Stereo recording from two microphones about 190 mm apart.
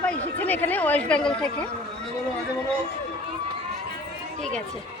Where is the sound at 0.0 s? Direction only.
10° left (ahead or behind).